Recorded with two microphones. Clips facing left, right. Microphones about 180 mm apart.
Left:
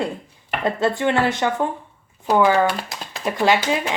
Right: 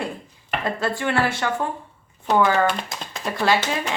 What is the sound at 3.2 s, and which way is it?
Speech, 15° left (ahead or behind).